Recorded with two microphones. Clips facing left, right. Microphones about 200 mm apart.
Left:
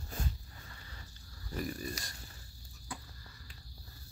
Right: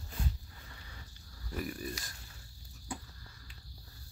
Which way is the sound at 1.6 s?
5° right (ahead or behind).